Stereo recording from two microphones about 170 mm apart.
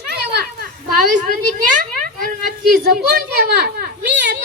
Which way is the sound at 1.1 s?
55° right (ahead or behind).